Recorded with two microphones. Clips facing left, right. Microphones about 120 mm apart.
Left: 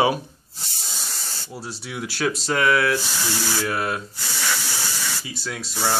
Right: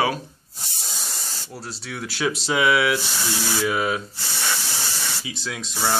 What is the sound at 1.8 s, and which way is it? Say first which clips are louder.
Speech: left 1 dB; 10° left (ahead or behind).